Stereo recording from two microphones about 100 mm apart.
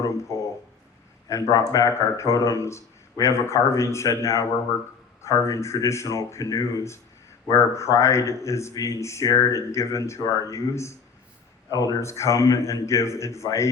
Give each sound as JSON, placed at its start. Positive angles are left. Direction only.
{"t": 0.0, "sound": "speech", "side_deg": 30}